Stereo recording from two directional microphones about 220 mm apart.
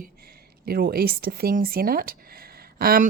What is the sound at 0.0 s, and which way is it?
Speech, 45° right (ahead or behind).